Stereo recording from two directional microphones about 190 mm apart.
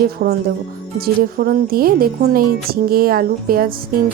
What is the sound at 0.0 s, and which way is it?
Speech, 55° right (ahead or behind).